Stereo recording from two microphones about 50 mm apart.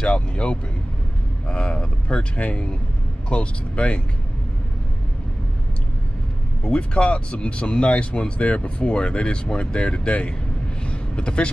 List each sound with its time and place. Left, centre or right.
0.0 s vehicle: left
1.5 s a sound: left
3.3 s speech: left
6.6 s speech: left